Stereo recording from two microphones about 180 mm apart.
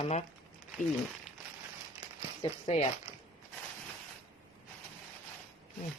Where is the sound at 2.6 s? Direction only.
35° left (ahead or behind).